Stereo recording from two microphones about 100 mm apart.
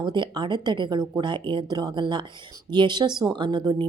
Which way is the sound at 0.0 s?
50° right (ahead or behind).